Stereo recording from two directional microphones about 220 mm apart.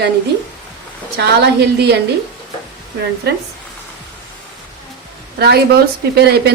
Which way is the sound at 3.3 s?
45° right (ahead or behind).